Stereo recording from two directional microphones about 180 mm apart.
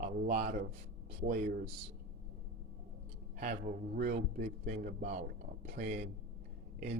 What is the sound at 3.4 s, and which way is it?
A man's voice, 50° right (ahead or behind).